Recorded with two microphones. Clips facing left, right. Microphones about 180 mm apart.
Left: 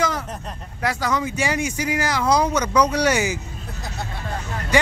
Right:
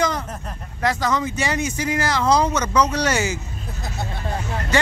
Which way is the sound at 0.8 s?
10° left (ahead or behind).